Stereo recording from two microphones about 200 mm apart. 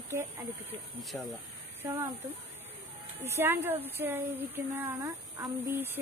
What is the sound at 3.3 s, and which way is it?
A woman's voice, 10° right (ahead or behind).